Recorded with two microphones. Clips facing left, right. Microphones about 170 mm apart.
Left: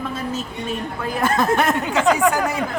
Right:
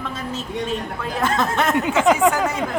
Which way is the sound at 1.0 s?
10° left (ahead or behind).